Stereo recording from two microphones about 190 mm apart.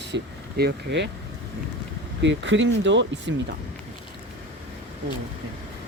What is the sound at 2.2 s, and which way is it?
Speech, 70° right (ahead or behind).